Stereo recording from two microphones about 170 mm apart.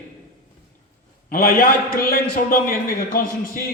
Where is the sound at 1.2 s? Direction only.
60° left (ahead or behind).